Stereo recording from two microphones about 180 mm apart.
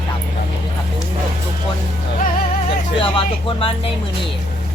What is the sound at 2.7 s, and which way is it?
Speech, 30° left (ahead or behind).